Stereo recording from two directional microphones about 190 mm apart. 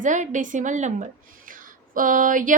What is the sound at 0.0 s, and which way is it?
A woman's voice, 40° right (ahead or behind).